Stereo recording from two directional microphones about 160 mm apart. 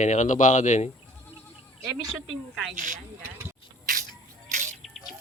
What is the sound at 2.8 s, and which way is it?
Speech, 50° right (ahead or behind).